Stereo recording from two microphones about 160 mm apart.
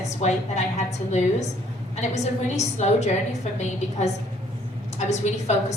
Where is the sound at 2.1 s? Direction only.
45° left (ahead or behind).